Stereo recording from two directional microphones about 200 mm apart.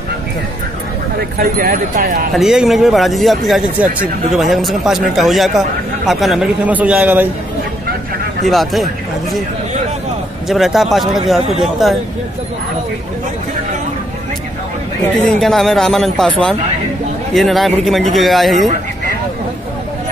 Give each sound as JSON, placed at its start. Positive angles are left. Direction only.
{"t": 1.4, "sound": "speech", "side_deg": -45}
{"t": 2.3, "sound": "a man's voice", "side_deg": 0}
{"t": 8.5, "sound": "speech", "side_deg": 0}
{"t": 10.5, "sound": "speech", "side_deg": 0}
{"t": 15.2, "sound": "speech", "side_deg": 0}